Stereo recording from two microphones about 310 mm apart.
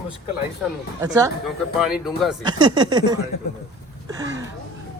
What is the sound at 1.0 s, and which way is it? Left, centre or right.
A man's voice, centre.